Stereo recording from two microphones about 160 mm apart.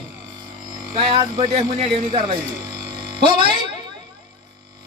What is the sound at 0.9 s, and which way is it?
Speech, 35° right (ahead or behind).